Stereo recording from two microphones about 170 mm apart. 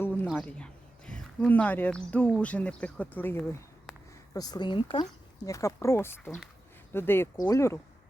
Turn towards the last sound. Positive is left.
turn(degrees=15)  # may be behind; listen again after turning